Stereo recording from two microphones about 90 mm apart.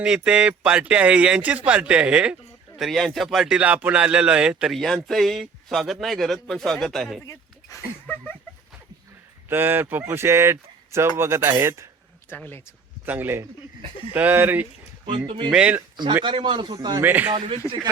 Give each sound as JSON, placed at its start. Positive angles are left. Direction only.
{"t": 0.0, "sound": "speech", "side_deg": -10}
{"t": 2.7, "sound": "a man's voice", "side_deg": 0}
{"t": 3.6, "sound": "speech", "side_deg": -15}
{"t": 4.7, "sound": "a man's voice", "side_deg": 0}
{"t": 7.7, "sound": "a sound", "side_deg": 35}
{"t": 8.0, "sound": "a sound", "side_deg": 15}
{"t": 9.5, "sound": "speech", "side_deg": -25}
{"t": 13.1, "sound": "speech", "side_deg": -25}
{"t": 15.3, "sound": "speech", "side_deg": -65}
{"t": 15.5, "sound": "speech", "side_deg": -15}
{"t": 16.2, "sound": "speech", "side_deg": -70}
{"t": 16.7, "sound": "speech", "side_deg": -50}
{"t": 17.0, "sound": "speech", "side_deg": -20}
{"t": 17.3, "sound": "speech", "side_deg": -90}